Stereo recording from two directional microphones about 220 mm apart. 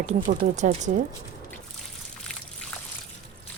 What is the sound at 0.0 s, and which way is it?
Speech, 35° right (ahead or behind).